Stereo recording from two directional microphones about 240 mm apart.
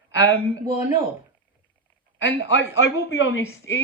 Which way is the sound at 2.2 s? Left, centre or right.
Left.